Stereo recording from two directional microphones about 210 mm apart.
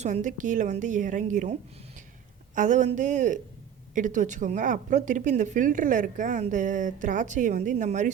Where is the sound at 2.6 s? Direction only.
35° right (ahead or behind).